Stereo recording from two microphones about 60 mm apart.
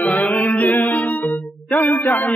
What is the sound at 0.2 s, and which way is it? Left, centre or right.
Music, left.